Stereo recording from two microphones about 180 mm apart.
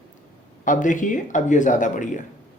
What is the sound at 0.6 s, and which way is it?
A man's voice, 45° left (ahead or behind).